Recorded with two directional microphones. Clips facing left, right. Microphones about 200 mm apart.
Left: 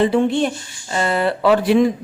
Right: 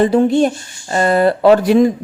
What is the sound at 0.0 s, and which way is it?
A woman's voice, 40° right (ahead or behind).